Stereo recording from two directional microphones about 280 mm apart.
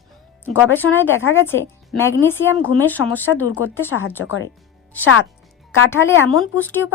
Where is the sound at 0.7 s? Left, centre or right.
Centre.